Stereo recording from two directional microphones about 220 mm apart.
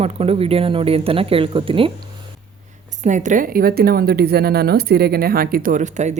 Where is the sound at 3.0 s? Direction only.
35° right (ahead or behind).